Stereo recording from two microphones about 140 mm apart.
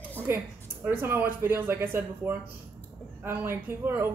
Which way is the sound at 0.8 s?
15° right (ahead or behind).